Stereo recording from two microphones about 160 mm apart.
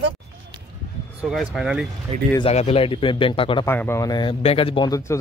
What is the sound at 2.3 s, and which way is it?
Speech, 40° left (ahead or behind).